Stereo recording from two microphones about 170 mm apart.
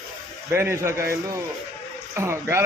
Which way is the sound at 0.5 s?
15° right (ahead or behind).